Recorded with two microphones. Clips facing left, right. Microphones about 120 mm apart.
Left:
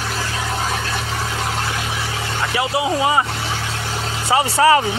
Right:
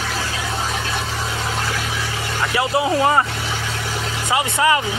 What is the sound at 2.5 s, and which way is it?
Speech, 15° left (ahead or behind).